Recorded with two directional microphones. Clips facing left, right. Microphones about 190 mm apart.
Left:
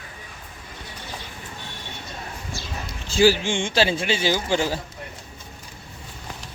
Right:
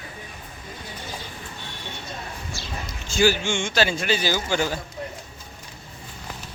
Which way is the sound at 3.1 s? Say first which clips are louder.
Left 3 dB; 30° left (ahead or behind).